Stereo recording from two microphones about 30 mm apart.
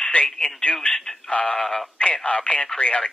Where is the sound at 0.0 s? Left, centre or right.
Left.